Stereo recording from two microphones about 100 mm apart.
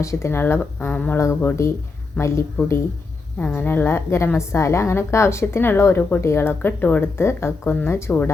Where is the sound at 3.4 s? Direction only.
15° left (ahead or behind).